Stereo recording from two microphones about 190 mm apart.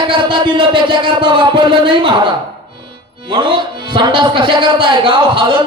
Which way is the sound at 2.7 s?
25° right (ahead or behind).